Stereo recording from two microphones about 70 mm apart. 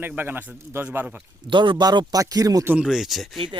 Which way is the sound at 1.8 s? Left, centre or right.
Right.